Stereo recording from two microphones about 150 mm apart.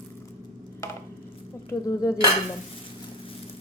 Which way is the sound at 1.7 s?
25° left (ahead or behind).